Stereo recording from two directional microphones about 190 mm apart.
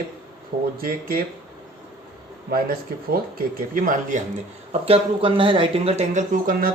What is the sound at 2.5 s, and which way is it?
Speech, 50° right (ahead or behind).